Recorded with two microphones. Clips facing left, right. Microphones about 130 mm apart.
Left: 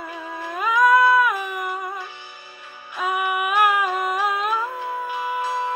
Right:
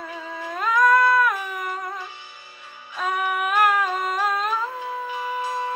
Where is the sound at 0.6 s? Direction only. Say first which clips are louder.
Left 2 dB; 5° left (ahead or behind).